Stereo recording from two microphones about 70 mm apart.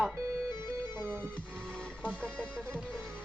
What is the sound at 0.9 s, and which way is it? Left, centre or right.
Music, right.